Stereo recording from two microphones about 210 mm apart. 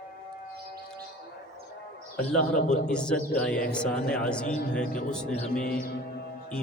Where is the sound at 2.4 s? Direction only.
40° left (ahead or behind).